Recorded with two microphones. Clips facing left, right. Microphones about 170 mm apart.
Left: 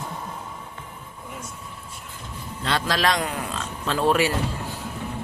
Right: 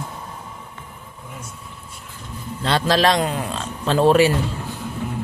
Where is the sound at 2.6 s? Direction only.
30° right (ahead or behind).